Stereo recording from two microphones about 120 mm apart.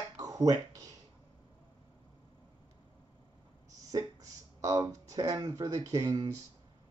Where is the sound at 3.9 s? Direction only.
30° right (ahead or behind).